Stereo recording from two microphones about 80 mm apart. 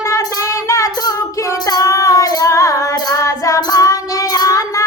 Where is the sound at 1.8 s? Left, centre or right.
Left.